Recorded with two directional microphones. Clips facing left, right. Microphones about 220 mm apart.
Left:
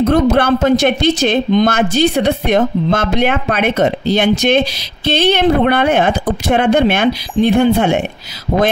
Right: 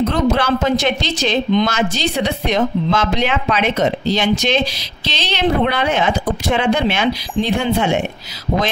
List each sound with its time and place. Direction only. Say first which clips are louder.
0.1 s speech: left 5 dB; 55° left (ahead or behind)